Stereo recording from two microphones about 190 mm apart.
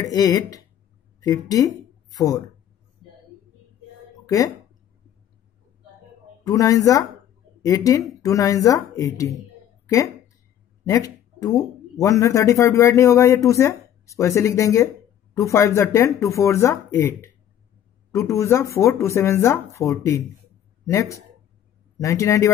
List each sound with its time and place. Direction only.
0.0 s speech: 20° left (ahead or behind)
4.3 s speech: 20° left (ahead or behind)
6.4 s speech: 20° left (ahead or behind)
9.8 s a sound: 15° left (ahead or behind)
10.9 s a man's voice: 20° left (ahead or behind)